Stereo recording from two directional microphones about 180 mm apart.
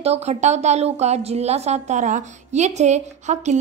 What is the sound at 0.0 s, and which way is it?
A woman's voice, 35° right (ahead or behind).